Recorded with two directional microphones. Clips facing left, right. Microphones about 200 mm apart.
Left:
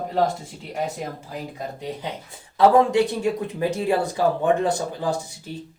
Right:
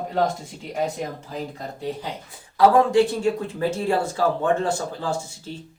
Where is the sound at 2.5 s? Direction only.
20° left (ahead or behind).